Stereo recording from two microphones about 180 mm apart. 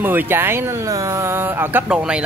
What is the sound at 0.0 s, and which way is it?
Speech, 10° right (ahead or behind).